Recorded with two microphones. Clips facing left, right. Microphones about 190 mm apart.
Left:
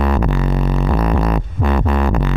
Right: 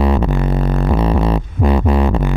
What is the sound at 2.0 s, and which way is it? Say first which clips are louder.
Music: right 1 dB; 5° right (ahead or behind).